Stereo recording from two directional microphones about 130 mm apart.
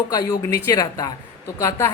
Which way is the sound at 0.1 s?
25° left (ahead or behind).